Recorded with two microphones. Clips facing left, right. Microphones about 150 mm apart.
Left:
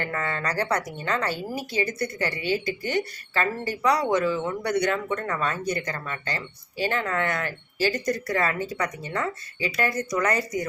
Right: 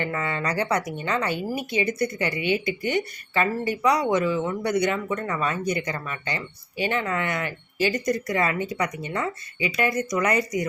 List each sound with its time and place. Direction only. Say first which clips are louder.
0.0 s speech: right 2 dB; 15° right (ahead or behind)